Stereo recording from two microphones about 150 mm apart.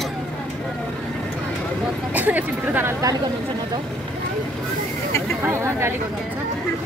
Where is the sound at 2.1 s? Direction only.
10° right (ahead or behind).